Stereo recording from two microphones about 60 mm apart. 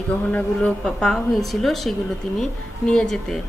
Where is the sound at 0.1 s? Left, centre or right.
Left.